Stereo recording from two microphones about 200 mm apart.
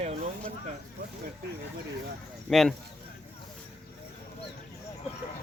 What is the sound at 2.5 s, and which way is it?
Speech, centre (ahead or behind).